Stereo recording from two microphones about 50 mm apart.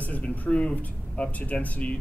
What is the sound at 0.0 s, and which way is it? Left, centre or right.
A man's voice, left.